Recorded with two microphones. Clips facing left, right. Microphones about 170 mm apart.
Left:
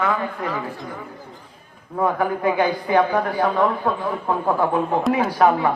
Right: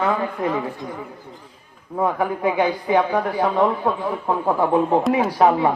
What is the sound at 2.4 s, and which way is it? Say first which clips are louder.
A woman's voice: even; 15° right (ahead or behind).